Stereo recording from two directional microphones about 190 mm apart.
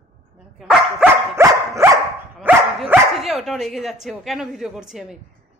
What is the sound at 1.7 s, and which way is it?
Dog, 15° right (ahead or behind).